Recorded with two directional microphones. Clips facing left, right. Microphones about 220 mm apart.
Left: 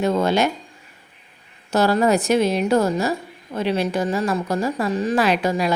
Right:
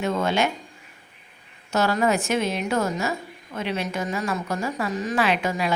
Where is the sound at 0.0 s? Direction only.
35° left (ahead or behind).